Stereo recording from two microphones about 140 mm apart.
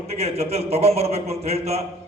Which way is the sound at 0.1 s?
45° right (ahead or behind).